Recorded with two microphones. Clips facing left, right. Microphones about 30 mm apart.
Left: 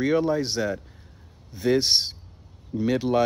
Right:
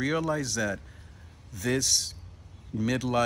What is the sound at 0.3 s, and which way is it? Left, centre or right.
Speech, left.